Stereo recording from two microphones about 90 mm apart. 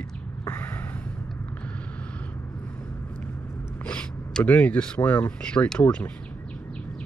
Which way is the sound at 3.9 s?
15° left (ahead or behind).